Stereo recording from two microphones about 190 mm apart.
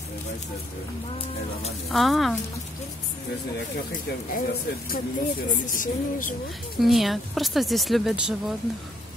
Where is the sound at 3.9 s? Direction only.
45° left (ahead or behind).